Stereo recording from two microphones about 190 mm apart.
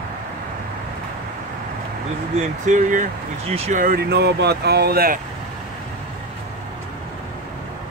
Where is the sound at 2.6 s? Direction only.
40° right (ahead or behind).